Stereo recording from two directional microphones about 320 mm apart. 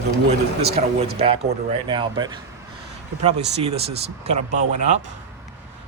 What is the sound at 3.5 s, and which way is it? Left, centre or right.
Speech, centre.